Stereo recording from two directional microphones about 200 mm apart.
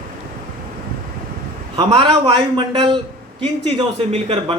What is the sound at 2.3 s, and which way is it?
Speech, 25° right (ahead or behind).